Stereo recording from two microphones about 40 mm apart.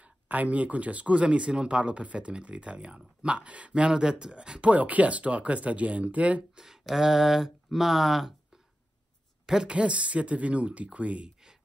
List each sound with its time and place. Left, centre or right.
0.0 s speech: right
6.5 s speech: centre
9.7 s speech: right